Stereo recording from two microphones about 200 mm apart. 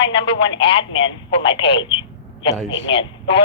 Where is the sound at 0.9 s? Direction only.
75° left (ahead or behind).